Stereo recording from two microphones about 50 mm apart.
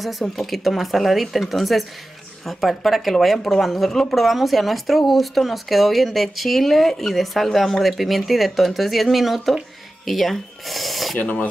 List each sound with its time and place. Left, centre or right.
0.0 s speech: centre
11.1 s speech: left